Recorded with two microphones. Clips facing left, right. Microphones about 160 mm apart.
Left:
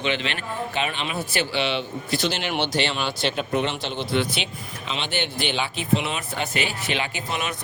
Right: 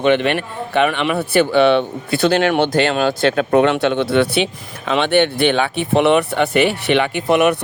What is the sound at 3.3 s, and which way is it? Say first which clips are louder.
Speech: right 11 dB; 65° right (ahead or behind).